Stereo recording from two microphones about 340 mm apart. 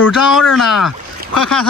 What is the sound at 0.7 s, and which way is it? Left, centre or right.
Rowboat, left.